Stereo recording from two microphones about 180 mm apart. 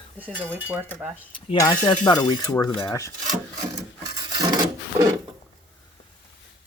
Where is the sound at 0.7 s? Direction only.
10° right (ahead or behind).